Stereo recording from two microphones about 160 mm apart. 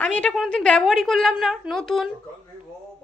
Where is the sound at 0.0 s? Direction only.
10° left (ahead or behind).